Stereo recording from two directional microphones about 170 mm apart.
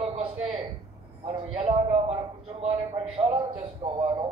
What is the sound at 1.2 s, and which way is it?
A man's voice, 30° right (ahead or behind).